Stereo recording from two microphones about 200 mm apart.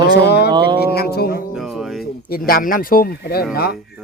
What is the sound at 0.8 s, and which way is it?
Speech, 50° left (ahead or behind).